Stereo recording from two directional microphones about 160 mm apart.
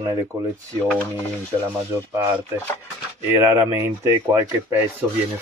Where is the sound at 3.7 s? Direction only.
20° right (ahead or behind).